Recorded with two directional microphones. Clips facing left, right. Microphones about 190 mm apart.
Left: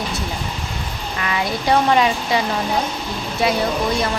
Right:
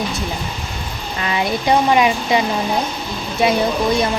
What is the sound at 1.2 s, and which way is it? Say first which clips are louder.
Speech: right 3 dB; 25° right (ahead or behind).